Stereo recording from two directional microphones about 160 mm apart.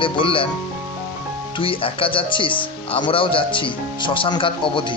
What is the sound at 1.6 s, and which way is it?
Speech, 35° left (ahead or behind).